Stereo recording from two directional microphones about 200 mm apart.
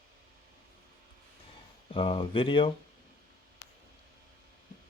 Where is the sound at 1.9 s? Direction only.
25° left (ahead or behind).